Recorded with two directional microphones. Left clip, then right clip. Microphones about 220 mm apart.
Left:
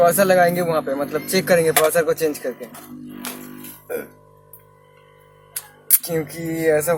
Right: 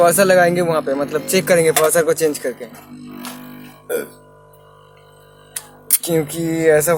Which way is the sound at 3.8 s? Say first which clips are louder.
Right 6 dB; 35° right (ahead or behind).